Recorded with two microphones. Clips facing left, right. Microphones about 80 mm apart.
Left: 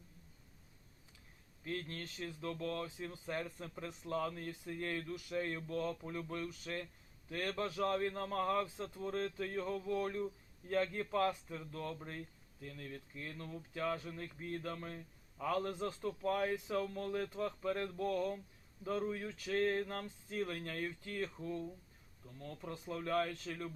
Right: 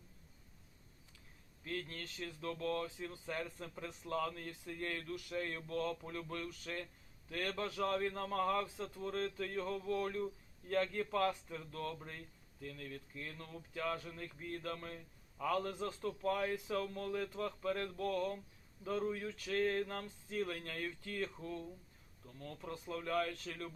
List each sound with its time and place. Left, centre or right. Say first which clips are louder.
1.6 s a man's voice: left 1 dB; centre
13.2 s a man's voice: left 2 dB; centre